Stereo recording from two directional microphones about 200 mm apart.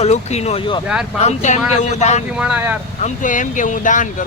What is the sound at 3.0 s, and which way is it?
Speech, 40° left (ahead or behind).